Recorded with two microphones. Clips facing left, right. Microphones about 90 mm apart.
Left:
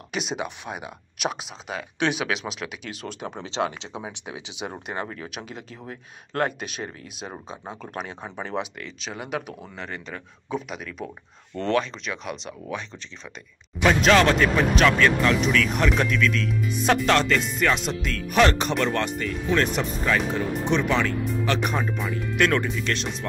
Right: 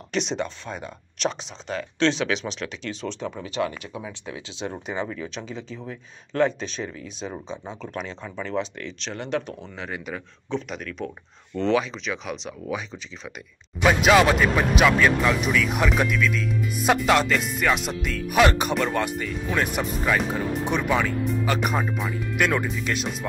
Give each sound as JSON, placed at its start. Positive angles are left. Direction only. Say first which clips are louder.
{"t": 0.1, "sound": "speech", "louder": "right 3 dB", "side_deg": 10}
{"t": 3.4, "sound": "speech", "louder": "left 1 dB", "side_deg": 25}
{"t": 10.5, "sound": "speech", "louder": "right 1 dB", "side_deg": 5}